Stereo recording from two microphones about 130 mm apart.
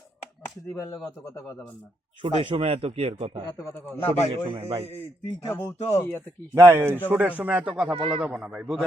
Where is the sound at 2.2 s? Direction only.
45° right (ahead or behind).